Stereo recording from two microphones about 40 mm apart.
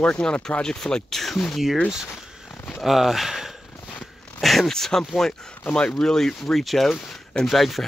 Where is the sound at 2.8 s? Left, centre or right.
Centre.